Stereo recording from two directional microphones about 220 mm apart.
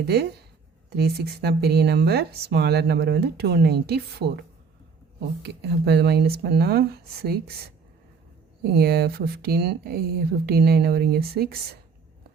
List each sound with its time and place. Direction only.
0.0 s speech: 50° right (ahead or behind)